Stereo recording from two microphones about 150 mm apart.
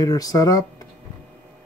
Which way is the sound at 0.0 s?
25° left (ahead or behind).